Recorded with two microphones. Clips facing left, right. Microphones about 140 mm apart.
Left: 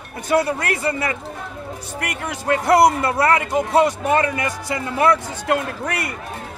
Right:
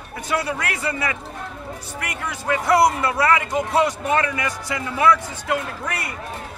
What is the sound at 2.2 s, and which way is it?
A man's voice, 45° left (ahead or behind).